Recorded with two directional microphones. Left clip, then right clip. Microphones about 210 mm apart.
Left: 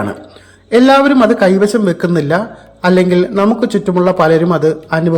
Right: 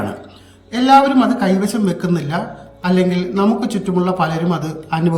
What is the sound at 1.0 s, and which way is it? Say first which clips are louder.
Speech: left 6 dB; 35° right (ahead or behind).